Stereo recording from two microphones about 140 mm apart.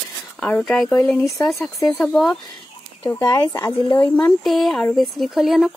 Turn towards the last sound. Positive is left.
turn(degrees=0)  # may be behind; listen again after turning